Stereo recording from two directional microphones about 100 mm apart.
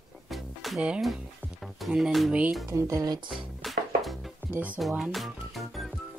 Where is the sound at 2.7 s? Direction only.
30° right (ahead or behind).